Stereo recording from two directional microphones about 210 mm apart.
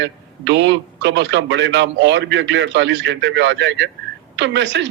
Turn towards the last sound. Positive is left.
turn(degrees=-55)  # may be behind; listen again after turning